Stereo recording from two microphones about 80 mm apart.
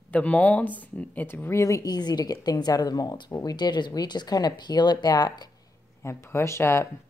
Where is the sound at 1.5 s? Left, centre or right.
Left.